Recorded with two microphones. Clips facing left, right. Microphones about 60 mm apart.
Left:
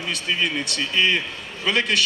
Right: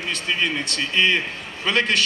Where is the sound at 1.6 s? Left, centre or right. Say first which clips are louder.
Right 1 dB; right.